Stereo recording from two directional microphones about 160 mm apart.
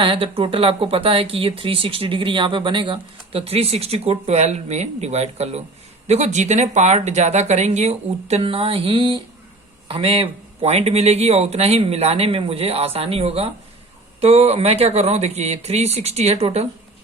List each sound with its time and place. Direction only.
0.0 s speech: 35° right (ahead or behind)